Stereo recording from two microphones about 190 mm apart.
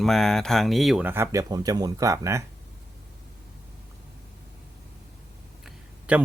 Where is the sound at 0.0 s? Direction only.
Centre (ahead or behind).